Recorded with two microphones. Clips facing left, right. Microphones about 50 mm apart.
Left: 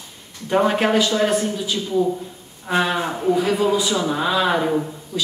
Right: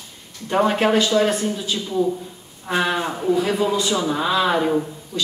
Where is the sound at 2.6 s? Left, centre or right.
Centre.